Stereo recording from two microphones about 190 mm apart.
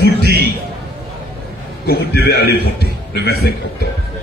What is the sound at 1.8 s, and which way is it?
A man's voice, 55° left (ahead or behind).